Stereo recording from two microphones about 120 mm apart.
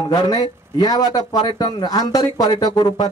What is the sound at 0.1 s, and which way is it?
Speech, 35° left (ahead or behind).